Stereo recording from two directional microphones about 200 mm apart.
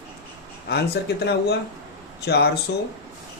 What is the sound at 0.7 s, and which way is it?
Speech, 55° left (ahead or behind).